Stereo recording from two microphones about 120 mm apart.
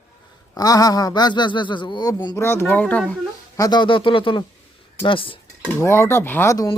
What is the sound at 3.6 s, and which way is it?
Speech, 35° left (ahead or behind).